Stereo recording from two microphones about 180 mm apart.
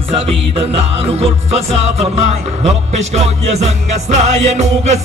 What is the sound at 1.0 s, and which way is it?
Music, 35° right (ahead or behind).